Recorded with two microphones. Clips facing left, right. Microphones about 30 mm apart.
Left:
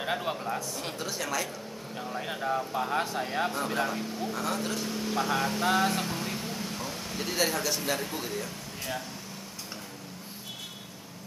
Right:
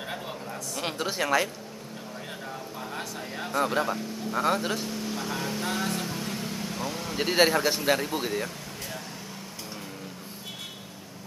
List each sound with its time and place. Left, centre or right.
0.0 s speech: centre
0.7 s speech: right
2.1 s speech: left
3.8 s speech: centre
4.6 s speech: centre
4.8 s speech: centre
6.4 s vehicle: centre
7.2 s speech: right